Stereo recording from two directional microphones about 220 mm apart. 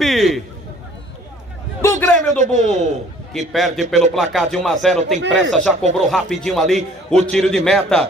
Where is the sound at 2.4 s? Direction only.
35° right (ahead or behind).